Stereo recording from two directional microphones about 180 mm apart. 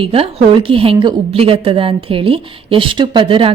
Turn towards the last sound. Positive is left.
turn(degrees=-30)  # may be behind; listen again after turning